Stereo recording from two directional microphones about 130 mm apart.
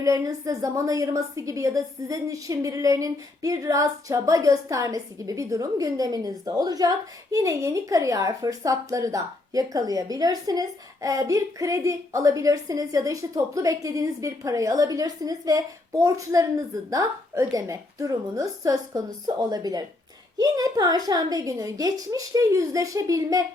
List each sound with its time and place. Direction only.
0.0 s a woman's voice: 25° right (ahead or behind)